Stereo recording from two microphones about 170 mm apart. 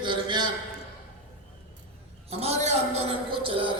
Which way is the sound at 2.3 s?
40° right (ahead or behind).